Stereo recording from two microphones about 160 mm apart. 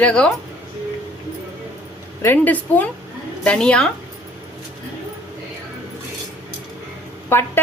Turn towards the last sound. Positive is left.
turn(degrees=15)  # may be behind; listen again after turning